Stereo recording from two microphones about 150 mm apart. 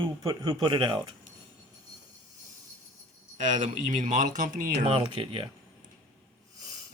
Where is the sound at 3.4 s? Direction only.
55° right (ahead or behind).